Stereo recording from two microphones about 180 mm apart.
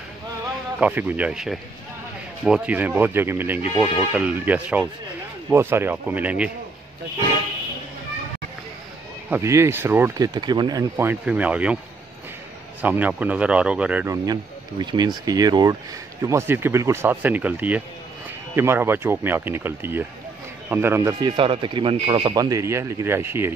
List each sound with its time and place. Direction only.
0.7 s speech: 10° right (ahead or behind)
9.3 s speech: 15° right (ahead or behind)
12.8 s speech: 10° right (ahead or behind)
14.1 s speech: 20° right (ahead or behind)